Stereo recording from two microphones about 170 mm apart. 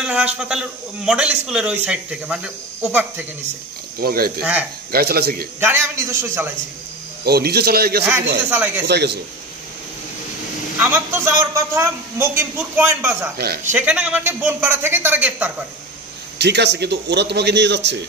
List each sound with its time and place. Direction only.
0.0 s a sound: 5° right (ahead or behind)
0.4 s a man's voice: 5° right (ahead or behind)
4.0 s speech: 60° right (ahead or behind)
4.4 s a man's voice: 10° right (ahead or behind)
4.9 s speech: 65° right (ahead or behind)
5.6 s a man's voice: 15° right (ahead or behind)
7.2 s speech: 70° right (ahead or behind)
8.5 s a man's voice: 10° right (ahead or behind)
8.8 s speech: 75° right (ahead or behind)
10.8 s a man's voice: 10° right (ahead or behind)
16.3 s a man's voice: 85° right